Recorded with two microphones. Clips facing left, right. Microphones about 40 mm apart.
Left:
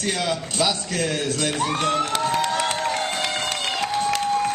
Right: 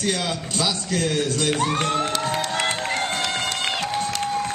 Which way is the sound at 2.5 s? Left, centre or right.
Right.